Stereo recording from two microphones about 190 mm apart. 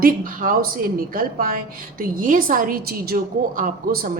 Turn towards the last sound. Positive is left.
turn(degrees=-50)  # may be behind; listen again after turning